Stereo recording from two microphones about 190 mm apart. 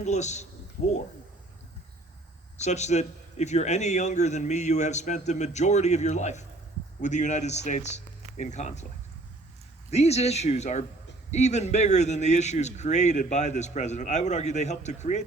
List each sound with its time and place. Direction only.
0.0 s a man's voice: 35° left (ahead or behind)
2.6 s a man's voice: 35° left (ahead or behind)
9.9 s a man's voice: 35° left (ahead or behind)